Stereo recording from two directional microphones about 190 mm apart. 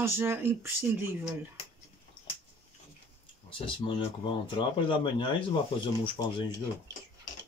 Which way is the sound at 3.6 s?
25° left (ahead or behind).